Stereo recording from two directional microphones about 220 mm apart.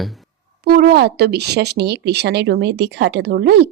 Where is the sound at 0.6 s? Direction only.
45° right (ahead or behind).